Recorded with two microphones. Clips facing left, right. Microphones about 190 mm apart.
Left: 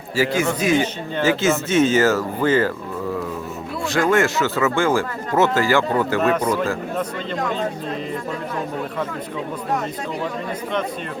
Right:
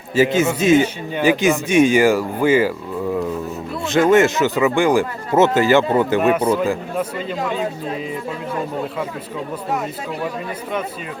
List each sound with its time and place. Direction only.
0.2 s speech: 20° right (ahead or behind)
3.8 s speech: 20° right (ahead or behind); by 7.7 s 5° right (ahead or behind)